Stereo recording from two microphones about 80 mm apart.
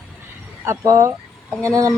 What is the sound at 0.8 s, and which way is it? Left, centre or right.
Speech, right.